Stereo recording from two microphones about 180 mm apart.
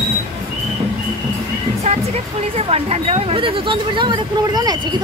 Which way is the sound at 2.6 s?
35° right (ahead or behind).